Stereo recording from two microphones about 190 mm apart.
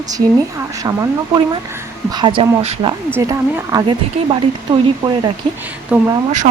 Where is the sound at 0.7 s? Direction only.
15° right (ahead or behind).